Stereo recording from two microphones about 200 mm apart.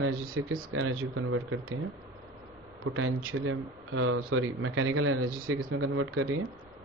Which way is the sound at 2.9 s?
90° right.